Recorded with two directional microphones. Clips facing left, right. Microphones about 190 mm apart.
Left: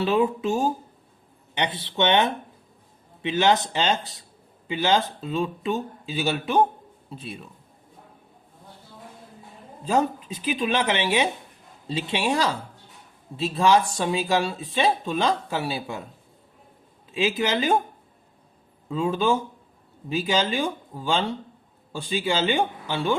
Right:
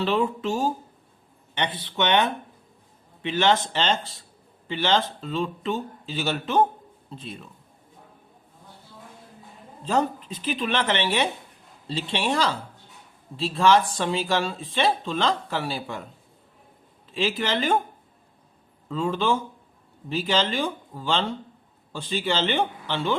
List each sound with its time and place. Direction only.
0.0 s speech: 15° left (ahead or behind)
1.8 s speech: 25° left (ahead or behind)
9.8 s speech: 10° left (ahead or behind)
17.2 s speech: 15° left (ahead or behind)
18.9 s speech: 15° left (ahead or behind)